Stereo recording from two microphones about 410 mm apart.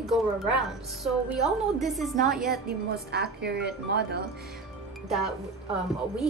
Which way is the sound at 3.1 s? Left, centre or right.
Right.